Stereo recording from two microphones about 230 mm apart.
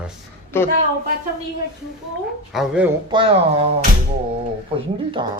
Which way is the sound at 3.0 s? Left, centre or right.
Right.